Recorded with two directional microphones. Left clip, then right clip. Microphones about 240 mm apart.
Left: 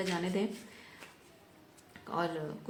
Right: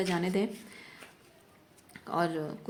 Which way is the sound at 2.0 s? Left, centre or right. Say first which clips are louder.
Right 4 dB; right.